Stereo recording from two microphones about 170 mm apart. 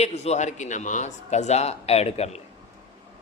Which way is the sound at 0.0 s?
40° left (ahead or behind).